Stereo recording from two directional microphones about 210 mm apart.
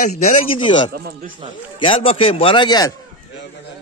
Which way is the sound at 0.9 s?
45° right (ahead or behind).